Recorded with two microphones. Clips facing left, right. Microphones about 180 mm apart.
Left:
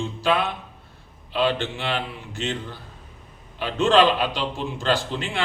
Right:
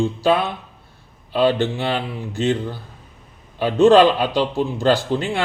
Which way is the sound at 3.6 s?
35° right (ahead or behind).